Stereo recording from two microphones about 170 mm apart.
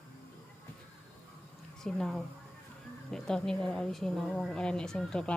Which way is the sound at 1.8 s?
5° left (ahead or behind).